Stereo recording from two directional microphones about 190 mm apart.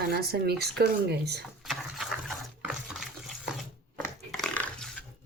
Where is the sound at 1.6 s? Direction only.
Centre (ahead or behind).